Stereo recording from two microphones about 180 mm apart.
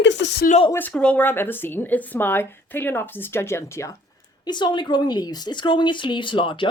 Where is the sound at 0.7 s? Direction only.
10° left (ahead or behind).